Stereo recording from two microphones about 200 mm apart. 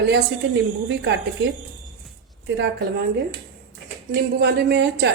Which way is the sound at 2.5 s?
60° right (ahead or behind).